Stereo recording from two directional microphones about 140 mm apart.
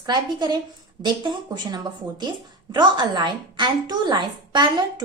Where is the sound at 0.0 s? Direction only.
30° right (ahead or behind).